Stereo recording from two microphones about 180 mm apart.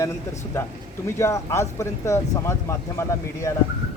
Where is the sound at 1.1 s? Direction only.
15° left (ahead or behind).